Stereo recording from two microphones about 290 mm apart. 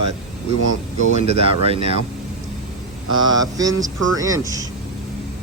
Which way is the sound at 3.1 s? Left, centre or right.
Right.